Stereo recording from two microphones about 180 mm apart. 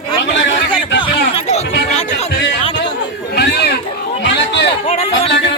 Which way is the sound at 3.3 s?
65° left (ahead or behind).